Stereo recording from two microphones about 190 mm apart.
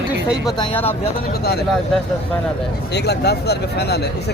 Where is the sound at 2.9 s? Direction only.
60° left (ahead or behind).